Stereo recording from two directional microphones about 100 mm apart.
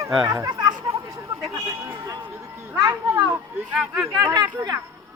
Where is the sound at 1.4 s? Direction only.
35° right (ahead or behind).